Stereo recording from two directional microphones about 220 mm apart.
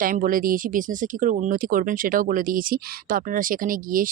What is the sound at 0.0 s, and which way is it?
Speech, 40° right (ahead or behind).